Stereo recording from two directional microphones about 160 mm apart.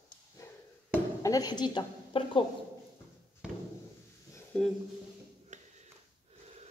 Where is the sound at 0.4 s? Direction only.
20° left (ahead or behind).